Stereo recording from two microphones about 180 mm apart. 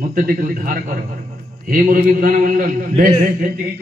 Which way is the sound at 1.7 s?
50° right (ahead or behind).